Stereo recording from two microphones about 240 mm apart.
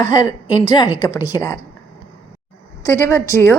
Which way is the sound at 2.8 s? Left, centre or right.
Centre.